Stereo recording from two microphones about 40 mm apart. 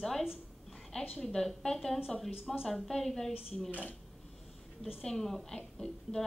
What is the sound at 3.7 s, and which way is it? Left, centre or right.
Speech, left.